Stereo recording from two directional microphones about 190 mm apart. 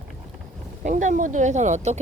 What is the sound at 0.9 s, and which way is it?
Speech, 40° right (ahead or behind).